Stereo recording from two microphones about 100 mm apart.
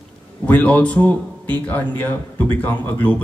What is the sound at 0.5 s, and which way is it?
Speech, 15° left (ahead or behind).